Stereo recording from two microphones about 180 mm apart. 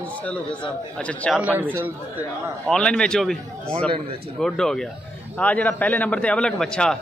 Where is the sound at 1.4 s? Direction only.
10° right (ahead or behind).